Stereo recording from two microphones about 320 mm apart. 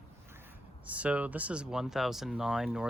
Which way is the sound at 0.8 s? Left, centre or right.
Centre.